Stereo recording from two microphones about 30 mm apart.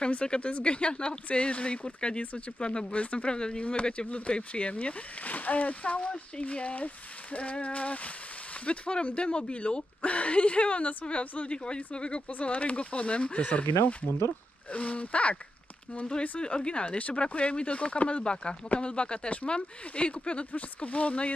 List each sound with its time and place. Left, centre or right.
0.4 s speech: left
2.9 s speech: left
3.3 s speech: left
4.1 s speech: left
5.9 s speech: left
8.6 s speech: left
11.5 s speech: left
12.3 s speech: left
13.4 s speech: left
18.2 s speech: left
20.5 s speech: left